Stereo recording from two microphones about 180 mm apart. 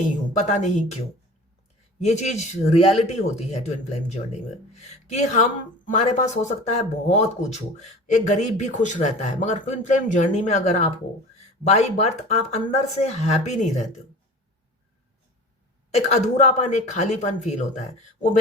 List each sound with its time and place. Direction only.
0.3 s speech: 40° left (ahead or behind)
2.0 s speech: 40° left (ahead or behind)
16.0 s speech: 40° left (ahead or behind)